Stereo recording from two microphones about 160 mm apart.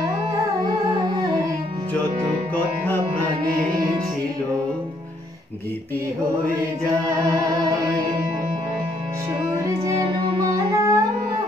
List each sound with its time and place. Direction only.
10.4 s music: 20° right (ahead or behind)